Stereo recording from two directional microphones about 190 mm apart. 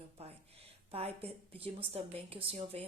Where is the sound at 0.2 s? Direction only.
35° right (ahead or behind).